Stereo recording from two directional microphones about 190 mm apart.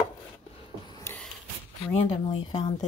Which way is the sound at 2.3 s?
25° left (ahead or behind).